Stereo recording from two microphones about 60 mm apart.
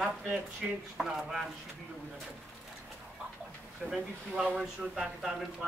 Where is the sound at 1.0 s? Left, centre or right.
Centre.